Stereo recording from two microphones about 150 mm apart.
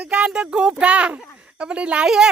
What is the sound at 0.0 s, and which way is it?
Speech, 10° right (ahead or behind).